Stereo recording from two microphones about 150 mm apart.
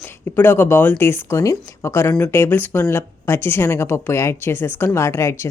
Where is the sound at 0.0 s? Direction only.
15° left (ahead or behind).